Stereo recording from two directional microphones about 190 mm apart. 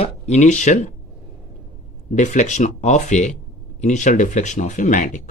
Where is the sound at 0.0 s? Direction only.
35° left (ahead or behind).